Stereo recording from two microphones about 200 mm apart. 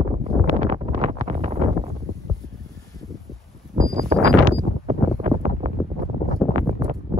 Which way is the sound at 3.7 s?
40° right (ahead or behind).